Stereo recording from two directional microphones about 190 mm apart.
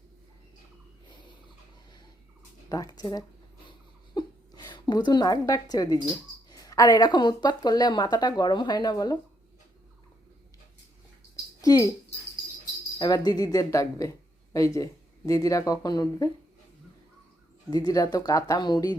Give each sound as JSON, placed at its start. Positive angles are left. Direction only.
{"t": 2.6, "sound": "speech", "side_deg": 20}
{"t": 3.7, "sound": "a sound", "side_deg": 25}
{"t": 6.5, "sound": "speech", "side_deg": 20}
{"t": 11.6, "sound": "speech", "side_deg": 20}
{"t": 13.0, "sound": "speech", "side_deg": 20}
{"t": 17.7, "sound": "speech", "side_deg": 20}